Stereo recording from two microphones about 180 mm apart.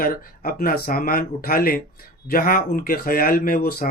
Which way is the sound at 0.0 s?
55° left (ahead or behind).